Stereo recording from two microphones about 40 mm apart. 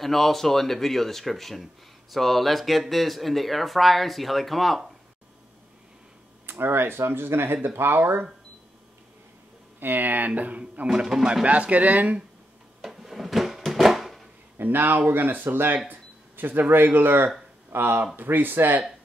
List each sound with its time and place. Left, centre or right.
0.0 s speech: centre
6.6 s speech: right
7.7 s speech: right
9.8 s speech: right
10.9 s speech: centre
11.4 s speech: right
12.8 s drawer open or close: centre
13.7 s a sound: centre
14.6 s speech: right